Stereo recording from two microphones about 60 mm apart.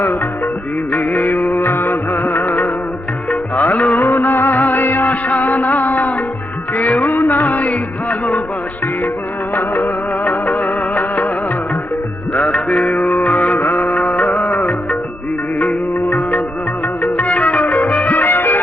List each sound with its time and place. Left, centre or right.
1.2 s music: left
1.7 s music of bollywood: left
2.4 s music: left
4.0 s music: left
10.9 s music: left
12.3 s music: left